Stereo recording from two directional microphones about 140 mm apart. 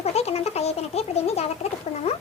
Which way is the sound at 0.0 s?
50° left (ahead or behind).